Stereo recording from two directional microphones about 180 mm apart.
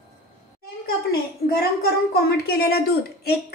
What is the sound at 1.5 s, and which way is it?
A woman's voice, 60° left (ahead or behind).